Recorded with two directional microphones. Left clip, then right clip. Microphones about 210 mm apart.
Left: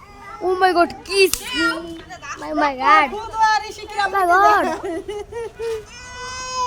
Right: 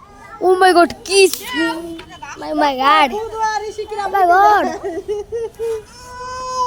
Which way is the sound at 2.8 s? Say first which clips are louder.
Right 1 dB; 25° right (ahead or behind).